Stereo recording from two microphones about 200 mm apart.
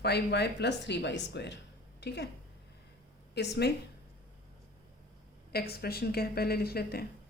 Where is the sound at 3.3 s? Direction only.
55° left (ahead or behind).